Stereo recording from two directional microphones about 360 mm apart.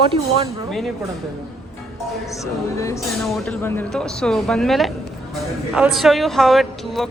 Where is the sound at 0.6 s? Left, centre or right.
Centre.